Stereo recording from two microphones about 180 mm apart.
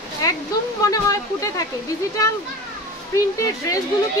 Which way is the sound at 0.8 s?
20° left (ahead or behind).